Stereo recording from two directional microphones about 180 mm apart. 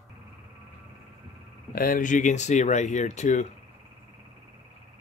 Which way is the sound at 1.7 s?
50° left (ahead or behind).